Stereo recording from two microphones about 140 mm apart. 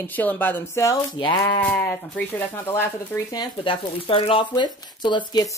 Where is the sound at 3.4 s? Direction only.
35° left (ahead or behind).